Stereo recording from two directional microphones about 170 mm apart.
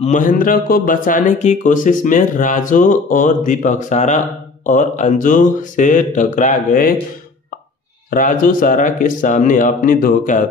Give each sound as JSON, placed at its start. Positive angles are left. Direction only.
{"t": 0.0, "sound": "speech", "side_deg": 50}
{"t": 8.1, "sound": "speech", "side_deg": 50}